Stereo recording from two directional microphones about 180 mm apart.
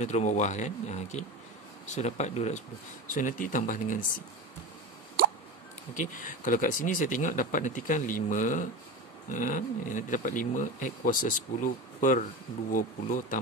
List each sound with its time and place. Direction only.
0.0 s speech: 40° left (ahead or behind)
5.9 s speech: 45° left (ahead or behind)